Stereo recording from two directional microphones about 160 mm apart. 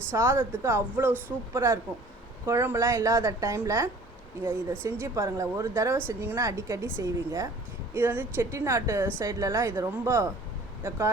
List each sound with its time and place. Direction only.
0.1 s a woman's voice: 15° right (ahead or behind)